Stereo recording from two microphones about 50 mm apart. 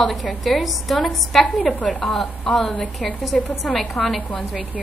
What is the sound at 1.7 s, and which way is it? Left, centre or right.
Speech, left.